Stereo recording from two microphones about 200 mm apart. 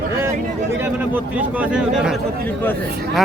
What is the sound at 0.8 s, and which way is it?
A man's voice, 10° right (ahead or behind).